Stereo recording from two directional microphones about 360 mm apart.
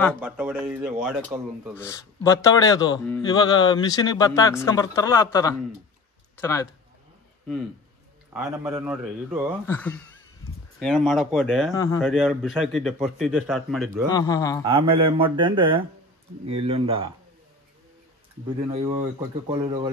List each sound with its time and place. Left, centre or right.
0.0 s speech: centre
1.8 s speech: centre
8.3 s speech: centre
14.6 s speech: centre
18.7 s speech: centre